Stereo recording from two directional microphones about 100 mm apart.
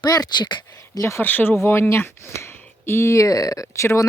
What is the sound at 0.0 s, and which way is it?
Speech, 45° left (ahead or behind).